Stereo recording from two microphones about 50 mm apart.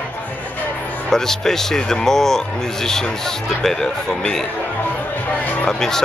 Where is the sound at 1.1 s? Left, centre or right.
Centre.